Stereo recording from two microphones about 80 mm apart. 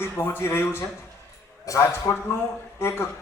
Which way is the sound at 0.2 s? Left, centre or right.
Left.